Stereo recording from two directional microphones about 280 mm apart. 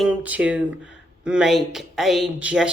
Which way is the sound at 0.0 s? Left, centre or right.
Centre.